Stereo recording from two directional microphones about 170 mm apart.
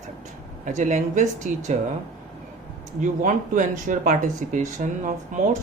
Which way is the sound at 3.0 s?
50° right (ahead or behind).